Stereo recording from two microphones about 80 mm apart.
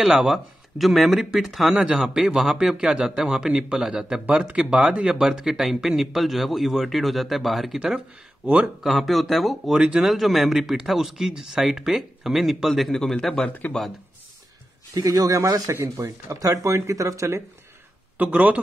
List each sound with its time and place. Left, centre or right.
0.0 s a man's voice: centre
8.4 s speech: centre
8.8 s a man's voice: centre
15.0 s speech: right
18.1 s speech: right